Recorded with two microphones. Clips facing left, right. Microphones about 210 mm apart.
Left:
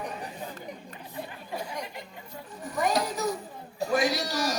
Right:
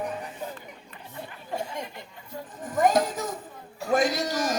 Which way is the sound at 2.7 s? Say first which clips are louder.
Right 5 dB; 50° right (ahead or behind).